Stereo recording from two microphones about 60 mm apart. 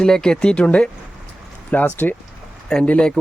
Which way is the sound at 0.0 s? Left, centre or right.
Centre.